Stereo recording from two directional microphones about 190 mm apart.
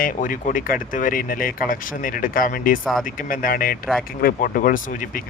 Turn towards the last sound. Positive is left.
turn(degrees=45)  # may be behind; listen again after turning